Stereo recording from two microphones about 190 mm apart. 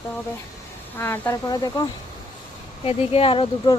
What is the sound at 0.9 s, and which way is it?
Speech, 10° left (ahead or behind).